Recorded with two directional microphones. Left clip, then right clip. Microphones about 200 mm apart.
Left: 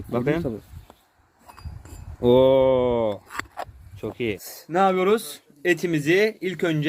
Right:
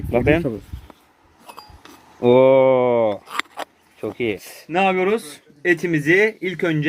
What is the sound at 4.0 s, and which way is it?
Speech, 20° left (ahead or behind).